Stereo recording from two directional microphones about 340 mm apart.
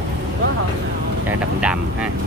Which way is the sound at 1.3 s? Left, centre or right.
Centre.